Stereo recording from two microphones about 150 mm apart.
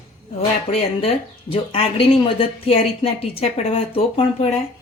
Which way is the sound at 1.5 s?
40° left (ahead or behind).